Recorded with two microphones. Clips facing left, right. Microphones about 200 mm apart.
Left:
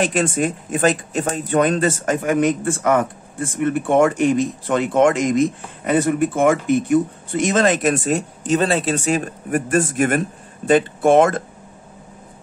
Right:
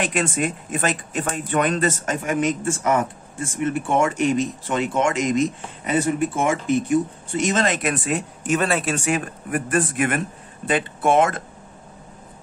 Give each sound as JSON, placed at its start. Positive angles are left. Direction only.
{"t": 0.0, "sound": "a man's voice", "side_deg": 50}
{"t": 8.5, "sound": "a man's voice", "side_deg": 30}